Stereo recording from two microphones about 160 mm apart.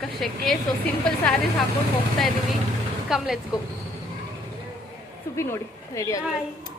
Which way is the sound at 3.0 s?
5° right (ahead or behind).